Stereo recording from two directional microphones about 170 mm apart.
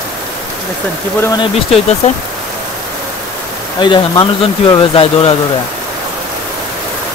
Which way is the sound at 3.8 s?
30° left (ahead or behind).